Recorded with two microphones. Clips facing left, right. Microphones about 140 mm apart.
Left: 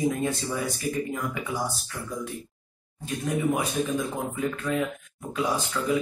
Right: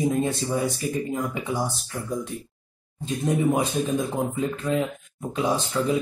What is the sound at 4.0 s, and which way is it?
Speech, 25° right (ahead or behind).